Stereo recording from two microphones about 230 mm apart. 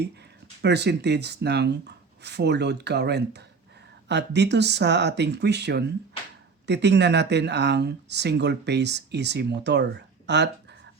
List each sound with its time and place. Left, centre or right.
0.6 s speech: right